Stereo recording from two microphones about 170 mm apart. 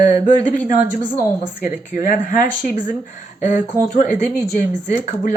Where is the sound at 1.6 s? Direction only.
50° left (ahead or behind).